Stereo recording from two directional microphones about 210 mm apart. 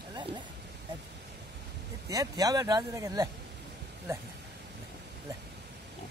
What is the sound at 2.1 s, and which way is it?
Speech, 15° right (ahead or behind).